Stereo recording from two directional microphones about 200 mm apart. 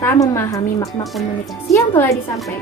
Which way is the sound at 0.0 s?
15° left (ahead or behind).